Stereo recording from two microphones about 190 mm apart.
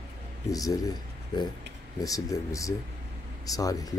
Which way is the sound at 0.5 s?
20° left (ahead or behind).